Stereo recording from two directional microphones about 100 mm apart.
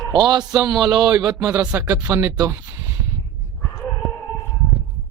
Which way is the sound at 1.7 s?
25° right (ahead or behind).